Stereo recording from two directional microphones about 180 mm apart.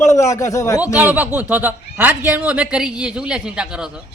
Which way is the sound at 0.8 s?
10° right (ahead or behind).